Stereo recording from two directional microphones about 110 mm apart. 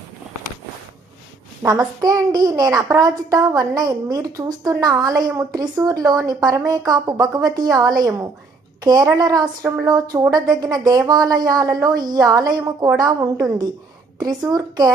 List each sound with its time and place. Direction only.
1.6 s a child's voice: 30° right (ahead or behind)